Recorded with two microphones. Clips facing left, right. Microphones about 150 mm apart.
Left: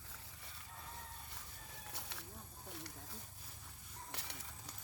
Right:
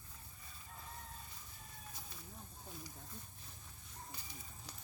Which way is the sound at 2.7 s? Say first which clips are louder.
Left 1 dB; 75° left (ahead or behind).